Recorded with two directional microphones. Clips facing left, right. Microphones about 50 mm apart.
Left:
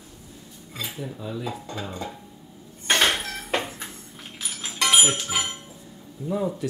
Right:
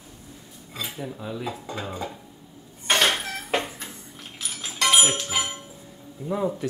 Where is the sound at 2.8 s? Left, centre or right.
Centre.